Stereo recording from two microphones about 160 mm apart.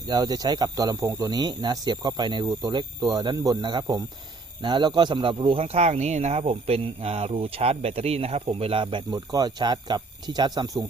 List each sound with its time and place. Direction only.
0.1 s speech: 25° right (ahead or behind)